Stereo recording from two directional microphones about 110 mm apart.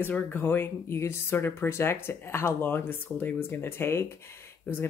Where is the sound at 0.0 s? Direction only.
20° left (ahead or behind).